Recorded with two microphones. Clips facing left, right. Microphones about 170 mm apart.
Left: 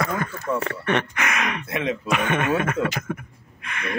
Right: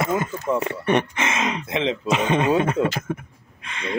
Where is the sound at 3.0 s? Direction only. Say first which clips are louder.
Right 2 dB; 25° right (ahead or behind).